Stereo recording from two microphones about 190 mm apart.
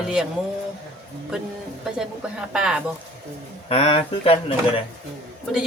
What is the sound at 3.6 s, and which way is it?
Speech, 30° left (ahead or behind).